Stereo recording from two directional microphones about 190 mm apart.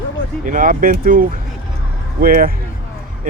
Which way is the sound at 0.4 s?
45° right (ahead or behind).